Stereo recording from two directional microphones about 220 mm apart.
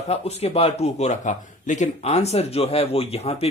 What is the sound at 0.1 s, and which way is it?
Speech, 30° left (ahead or behind).